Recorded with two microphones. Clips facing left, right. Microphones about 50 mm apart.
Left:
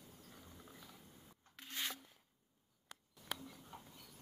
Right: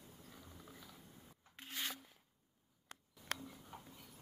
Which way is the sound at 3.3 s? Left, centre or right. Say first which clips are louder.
Right 2 dB; right.